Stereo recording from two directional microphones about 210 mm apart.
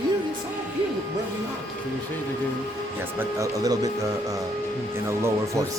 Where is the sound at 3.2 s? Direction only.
15° right (ahead or behind).